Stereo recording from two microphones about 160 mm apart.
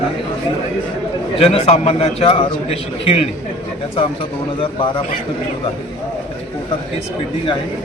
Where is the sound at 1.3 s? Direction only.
40° left (ahead or behind).